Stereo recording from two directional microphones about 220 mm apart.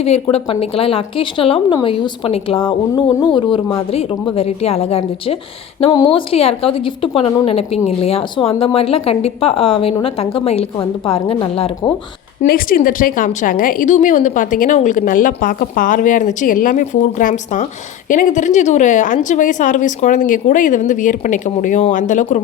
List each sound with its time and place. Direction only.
0.0 s speech: 30° left (ahead or behind)
12.4 s a woman's voice: 40° left (ahead or behind)